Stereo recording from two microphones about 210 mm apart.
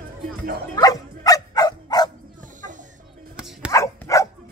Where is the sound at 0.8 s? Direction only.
15° left (ahead or behind).